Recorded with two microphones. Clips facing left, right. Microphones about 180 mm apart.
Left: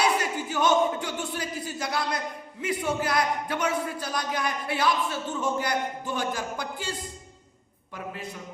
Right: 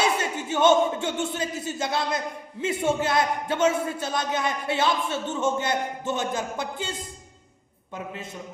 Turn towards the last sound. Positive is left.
turn(degrees=-25)  # may be behind; listen again after turning